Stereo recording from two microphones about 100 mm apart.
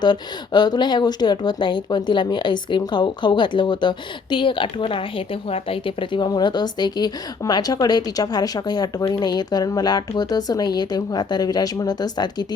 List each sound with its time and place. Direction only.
0.0 s a woman's voice: 45° left (ahead or behind)